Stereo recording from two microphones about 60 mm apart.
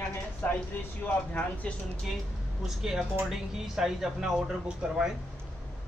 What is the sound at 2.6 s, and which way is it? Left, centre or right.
Speech, centre.